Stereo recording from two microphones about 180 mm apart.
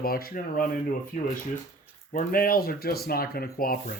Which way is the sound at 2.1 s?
55° left (ahead or behind).